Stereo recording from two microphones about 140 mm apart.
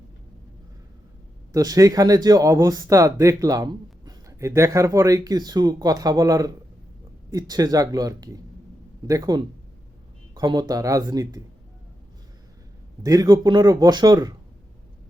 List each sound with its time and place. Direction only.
1.5 s speech: 25° right (ahead or behind)
13.0 s speech: 25° right (ahead or behind)